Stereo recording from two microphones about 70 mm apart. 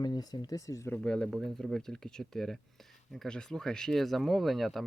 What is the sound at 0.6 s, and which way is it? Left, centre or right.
Speech, left.